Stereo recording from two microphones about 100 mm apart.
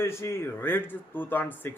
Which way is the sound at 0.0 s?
25° left (ahead or behind).